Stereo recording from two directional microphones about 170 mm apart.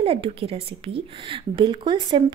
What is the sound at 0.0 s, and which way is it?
A woman's voice, 35° right (ahead or behind).